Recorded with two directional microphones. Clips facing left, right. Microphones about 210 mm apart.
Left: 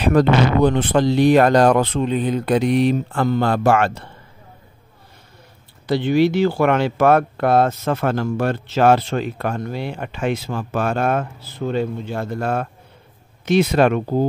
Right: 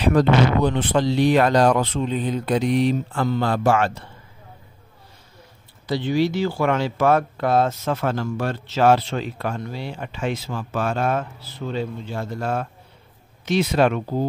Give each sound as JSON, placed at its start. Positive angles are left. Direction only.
{"t": 0.0, "sound": "speech", "side_deg": 55}
{"t": 5.9, "sound": "speech", "side_deg": 60}